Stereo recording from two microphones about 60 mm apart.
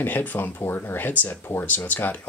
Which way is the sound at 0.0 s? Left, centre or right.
Left.